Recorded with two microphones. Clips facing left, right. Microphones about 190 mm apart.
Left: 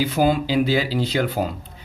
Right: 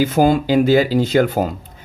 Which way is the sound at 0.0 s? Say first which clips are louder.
Right 5 dB; 45° right (ahead or behind).